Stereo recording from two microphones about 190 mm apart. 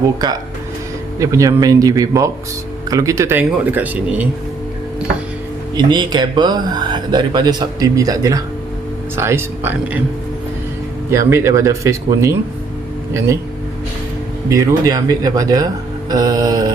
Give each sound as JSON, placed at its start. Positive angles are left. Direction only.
{"t": 1.2, "sound": "speech", "side_deg": -15}
{"t": 5.7, "sound": "speech", "side_deg": -25}
{"t": 11.3, "sound": "speech", "side_deg": -15}
{"t": 14.5, "sound": "speech", "side_deg": -20}